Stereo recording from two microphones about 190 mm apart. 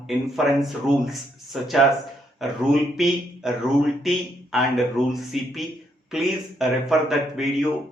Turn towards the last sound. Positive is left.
turn(degrees=0)  # may be behind; listen again after turning